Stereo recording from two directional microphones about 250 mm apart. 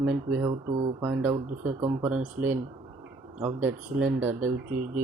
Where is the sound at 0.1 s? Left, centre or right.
Centre.